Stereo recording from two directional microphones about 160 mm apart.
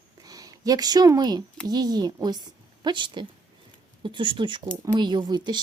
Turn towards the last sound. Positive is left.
turn(degrees=-25)  # may be behind; listen again after turning